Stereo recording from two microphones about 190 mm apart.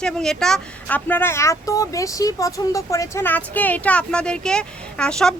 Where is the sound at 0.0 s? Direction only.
5° left (ahead or behind).